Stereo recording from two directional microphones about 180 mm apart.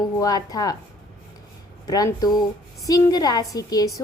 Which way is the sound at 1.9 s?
20° left (ahead or behind).